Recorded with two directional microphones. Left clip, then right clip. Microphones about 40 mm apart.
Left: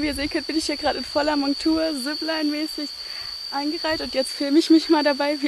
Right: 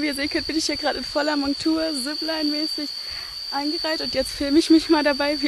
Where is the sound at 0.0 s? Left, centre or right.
Centre.